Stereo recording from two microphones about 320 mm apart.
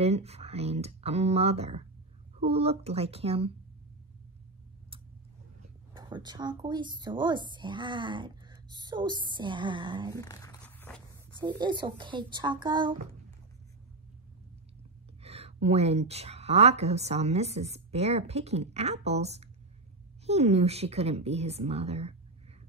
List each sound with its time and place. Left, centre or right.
0.0 s a woman's voice: centre
5.6 s speech: centre
10.1 s zipper: centre
11.4 s speech: centre
15.2 s a woman's voice: centre